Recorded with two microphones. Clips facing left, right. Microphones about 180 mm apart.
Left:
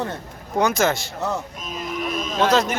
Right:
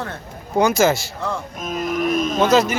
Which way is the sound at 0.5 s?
Centre (ahead or behind).